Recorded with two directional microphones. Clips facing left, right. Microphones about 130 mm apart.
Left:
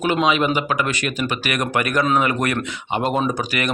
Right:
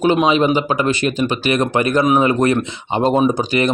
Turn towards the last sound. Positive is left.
turn(degrees=-25)  # may be behind; listen again after turning